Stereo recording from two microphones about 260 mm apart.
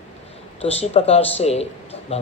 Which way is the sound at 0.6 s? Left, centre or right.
Left.